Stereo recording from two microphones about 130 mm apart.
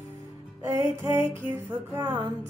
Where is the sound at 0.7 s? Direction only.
20° right (ahead or behind).